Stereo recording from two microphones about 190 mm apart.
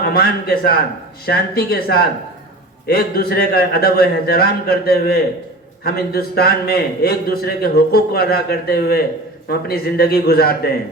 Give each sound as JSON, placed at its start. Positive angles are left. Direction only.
{"t": 0.0, "sound": "a man's voice", "side_deg": 55}